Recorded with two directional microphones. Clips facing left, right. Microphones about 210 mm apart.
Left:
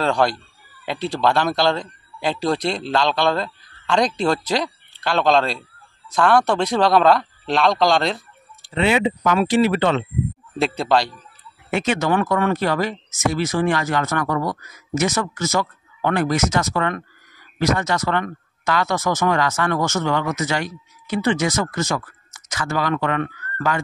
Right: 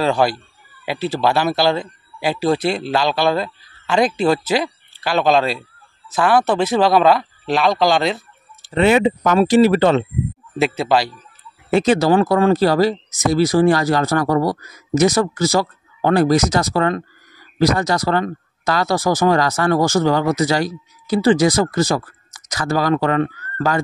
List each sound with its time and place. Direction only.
0.0 s a man's voice: 5° right (ahead or behind)
8.7 s speech: 45° right (ahead or behind)
10.6 s a man's voice: 5° right (ahead or behind)
11.7 s speech: 35° right (ahead or behind)